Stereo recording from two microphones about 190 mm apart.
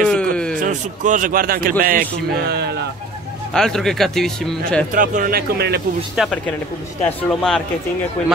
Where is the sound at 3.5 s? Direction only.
5° left (ahead or behind).